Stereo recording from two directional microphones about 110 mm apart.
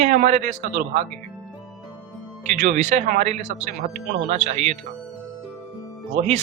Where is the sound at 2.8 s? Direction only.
90° right.